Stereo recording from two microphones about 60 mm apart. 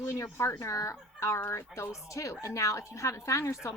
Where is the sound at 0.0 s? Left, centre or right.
Left.